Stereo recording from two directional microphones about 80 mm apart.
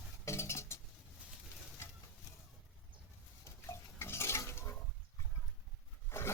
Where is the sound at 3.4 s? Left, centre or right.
Left.